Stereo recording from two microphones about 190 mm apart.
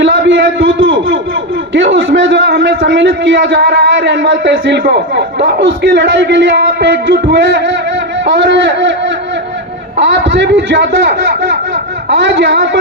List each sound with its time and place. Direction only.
0.0 s a sound: 75° right (ahead or behind)
1.7 s a man's voice: 75° right (ahead or behind)
10.0 s a man's voice: 75° right (ahead or behind)